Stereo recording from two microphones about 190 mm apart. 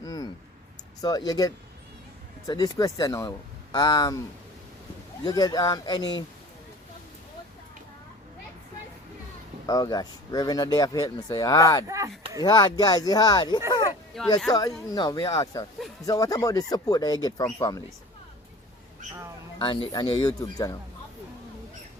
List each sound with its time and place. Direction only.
0.0 s a sound: 20° left (ahead or behind)
1.0 s speech: 20° left (ahead or behind)
5.2 s speech: 20° left (ahead or behind)
9.6 s speech: 20° left (ahead or behind)
11.9 s speech: 15° right (ahead or behind)
12.4 s speech: 20° left (ahead or behind)
14.1 s speech: centre (ahead or behind)
14.5 s speech: 20° left (ahead or behind)
19.5 s speech: 25° left (ahead or behind)